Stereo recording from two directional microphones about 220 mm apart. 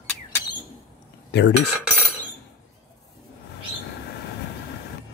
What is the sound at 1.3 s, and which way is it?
Speech, 50° left (ahead or behind).